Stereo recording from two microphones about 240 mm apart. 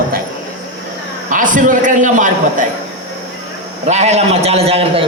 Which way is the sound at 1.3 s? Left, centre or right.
Right.